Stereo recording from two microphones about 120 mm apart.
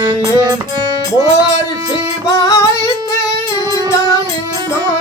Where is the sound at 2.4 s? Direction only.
25° left (ahead or behind).